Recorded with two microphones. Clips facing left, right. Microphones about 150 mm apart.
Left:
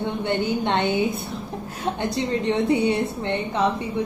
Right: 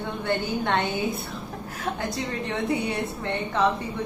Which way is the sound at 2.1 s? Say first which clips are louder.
Left 7 dB; 25° left (ahead or behind).